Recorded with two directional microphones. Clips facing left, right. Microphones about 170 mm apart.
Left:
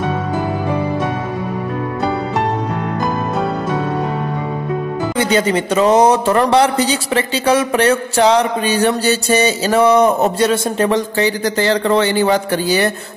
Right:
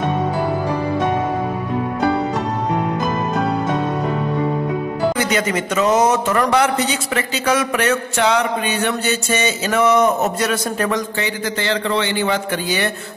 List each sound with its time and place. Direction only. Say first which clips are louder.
5.1 s speech: left 4 dB; 30° left (ahead or behind)